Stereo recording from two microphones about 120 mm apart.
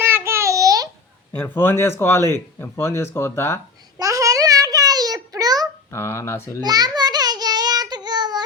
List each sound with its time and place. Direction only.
0.0 s child singing: 20° right (ahead or behind)
1.4 s speech: 20° left (ahead or behind)
3.9 s a sound: 25° right (ahead or behind)
5.9 s speech: 20° left (ahead or behind)
6.6 s child singing: 35° right (ahead or behind)